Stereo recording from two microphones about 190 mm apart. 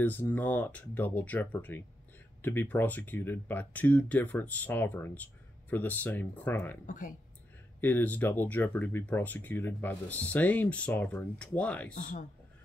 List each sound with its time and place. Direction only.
0.0 s speech: 10° left (ahead or behind)
6.9 s a man's voice: 45° left (ahead or behind)
7.8 s speech: 10° left (ahead or behind)
11.9 s a man's voice: 45° left (ahead or behind)